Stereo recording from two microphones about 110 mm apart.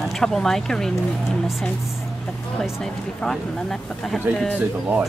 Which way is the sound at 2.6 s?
5° left (ahead or behind).